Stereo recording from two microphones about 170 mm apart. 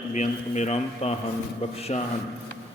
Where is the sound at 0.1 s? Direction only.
45° left (ahead or behind).